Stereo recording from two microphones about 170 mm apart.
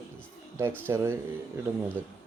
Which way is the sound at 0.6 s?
15° right (ahead or behind).